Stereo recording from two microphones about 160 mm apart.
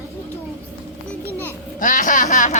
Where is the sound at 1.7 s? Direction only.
55° left (ahead or behind).